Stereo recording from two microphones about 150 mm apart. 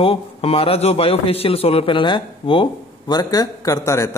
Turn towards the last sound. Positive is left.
turn(degrees=20)  # may be behind; listen again after turning